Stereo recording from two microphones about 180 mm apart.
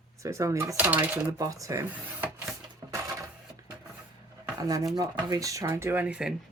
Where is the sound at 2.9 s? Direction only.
15° right (ahead or behind).